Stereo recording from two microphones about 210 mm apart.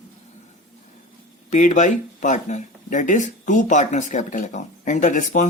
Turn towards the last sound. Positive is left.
turn(degrees=35)  # may be behind; listen again after turning